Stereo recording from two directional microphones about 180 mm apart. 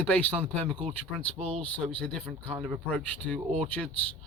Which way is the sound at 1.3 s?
35° right (ahead or behind).